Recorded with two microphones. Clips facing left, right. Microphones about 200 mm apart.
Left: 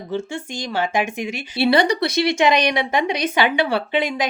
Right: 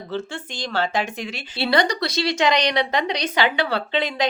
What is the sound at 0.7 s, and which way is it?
Speech, 15° left (ahead or behind).